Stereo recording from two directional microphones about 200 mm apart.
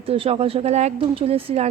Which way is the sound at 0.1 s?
30° right (ahead or behind).